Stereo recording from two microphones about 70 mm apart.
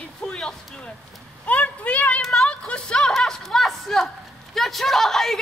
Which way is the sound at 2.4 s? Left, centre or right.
Centre.